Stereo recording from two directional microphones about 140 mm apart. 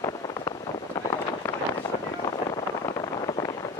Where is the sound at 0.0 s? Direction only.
30° left (ahead or behind).